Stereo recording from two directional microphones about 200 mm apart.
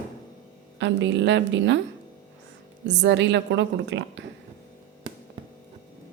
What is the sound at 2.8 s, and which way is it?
Speech, 60° right (ahead or behind).